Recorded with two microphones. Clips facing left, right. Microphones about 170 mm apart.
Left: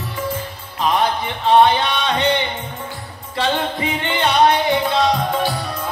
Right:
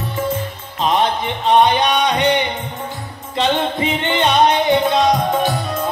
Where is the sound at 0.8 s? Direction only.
20° right (ahead or behind).